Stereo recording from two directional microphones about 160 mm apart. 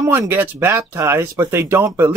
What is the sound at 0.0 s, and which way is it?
Speech, 15° right (ahead or behind).